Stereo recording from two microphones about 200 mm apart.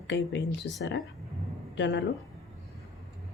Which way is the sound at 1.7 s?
65° left (ahead or behind).